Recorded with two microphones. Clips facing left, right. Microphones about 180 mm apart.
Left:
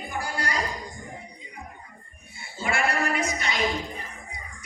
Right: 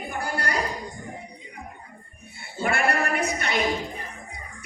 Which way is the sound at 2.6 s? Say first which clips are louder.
Right 2 dB; 60° right (ahead or behind).